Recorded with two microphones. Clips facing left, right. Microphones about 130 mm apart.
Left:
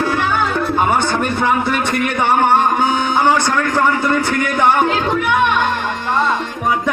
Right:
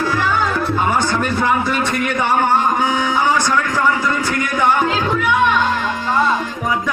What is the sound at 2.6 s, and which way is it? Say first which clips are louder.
Music: left 2 dB; 65° left (ahead or behind).